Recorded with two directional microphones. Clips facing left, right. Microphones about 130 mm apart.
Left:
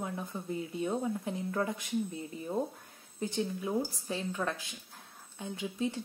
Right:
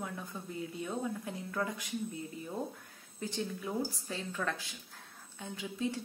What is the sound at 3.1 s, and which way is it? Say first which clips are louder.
Speech: left 4 dB; 20° left (ahead or behind).